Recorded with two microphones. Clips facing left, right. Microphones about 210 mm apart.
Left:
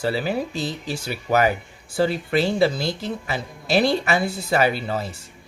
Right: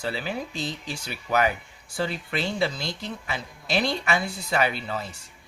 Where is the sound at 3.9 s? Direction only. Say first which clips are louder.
Left 5 dB; 35° left (ahead or behind).